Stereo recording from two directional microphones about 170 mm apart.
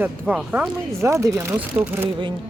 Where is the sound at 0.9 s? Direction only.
15° right (ahead or behind).